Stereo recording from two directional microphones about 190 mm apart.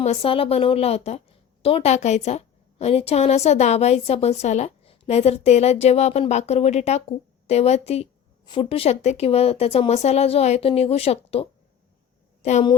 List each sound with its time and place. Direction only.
0.0 s a woman's voice: 30° left (ahead or behind)